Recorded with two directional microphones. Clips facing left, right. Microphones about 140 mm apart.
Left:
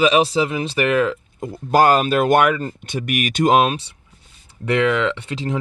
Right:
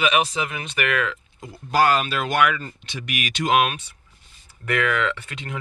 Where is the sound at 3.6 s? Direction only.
30° left (ahead or behind).